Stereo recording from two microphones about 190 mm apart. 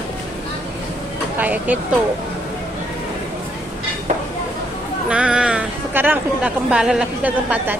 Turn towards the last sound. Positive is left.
turn(degrees=-10)  # may be behind; listen again after turning